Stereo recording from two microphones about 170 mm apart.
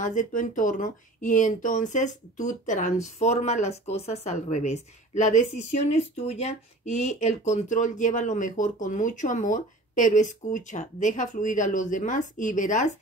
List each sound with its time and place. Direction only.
0.0 s speech: 50° left (ahead or behind)